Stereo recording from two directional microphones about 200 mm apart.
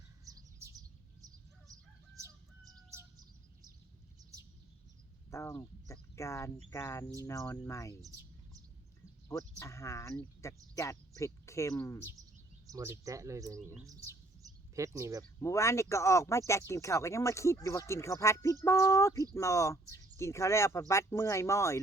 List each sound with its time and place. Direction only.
0.3 s bird: 15° right (ahead or behind)
2.1 s chicken: 15° right (ahead or behind)
5.3 s speech: 15° left (ahead or behind)
9.3 s speech: 15° left (ahead or behind)
12.7 s speech: 15° right (ahead or behind)
14.4 s a sound: 20° right (ahead or behind)
14.9 s speech: 15° right (ahead or behind)
15.4 s speech: 15° left (ahead or behind)